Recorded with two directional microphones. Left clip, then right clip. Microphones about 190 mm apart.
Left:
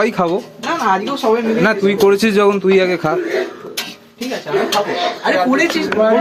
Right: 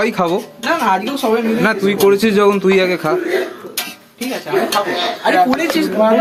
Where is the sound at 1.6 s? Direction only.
15° left (ahead or behind).